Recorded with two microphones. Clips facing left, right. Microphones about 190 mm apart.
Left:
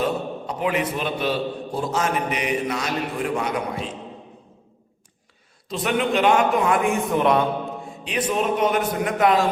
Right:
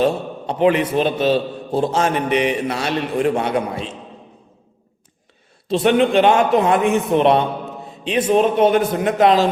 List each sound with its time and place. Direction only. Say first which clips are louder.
0.0 s a man's voice: right 5 dB; 30° right (ahead or behind)
5.8 s a man's voice: right 6 dB; 25° right (ahead or behind)